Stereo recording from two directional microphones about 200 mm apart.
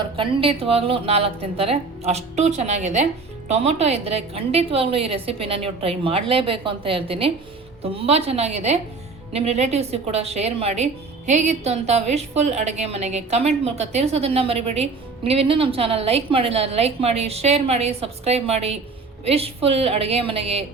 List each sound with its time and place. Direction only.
0.2 s a woman's voice: 25° right (ahead or behind)